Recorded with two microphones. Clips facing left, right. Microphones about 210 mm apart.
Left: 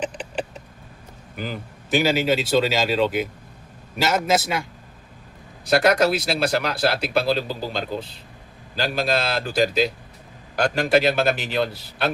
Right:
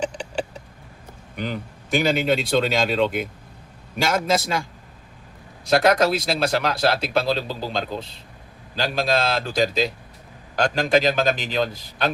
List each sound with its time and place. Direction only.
0.0 s a sound: 5° left (ahead or behind)
1.4 s speech: 5° left (ahead or behind)
5.6 s a man's voice: centre (ahead or behind)